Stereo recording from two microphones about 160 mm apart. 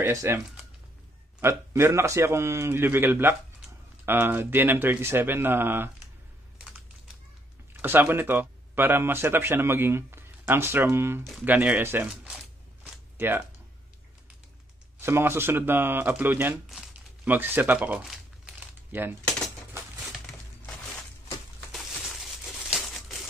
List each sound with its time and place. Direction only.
0.0 s speech: 15° right (ahead or behind)
1.4 s speech: 15° right (ahead or behind)
7.8 s speech: 15° right (ahead or behind)
12.8 s a sound: 10° right (ahead or behind)
15.0 s speech: 15° right (ahead or behind)
21.7 s crumpling: centre (ahead or behind)